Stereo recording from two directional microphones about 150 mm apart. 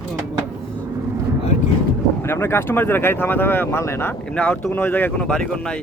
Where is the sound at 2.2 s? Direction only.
15° left (ahead or behind).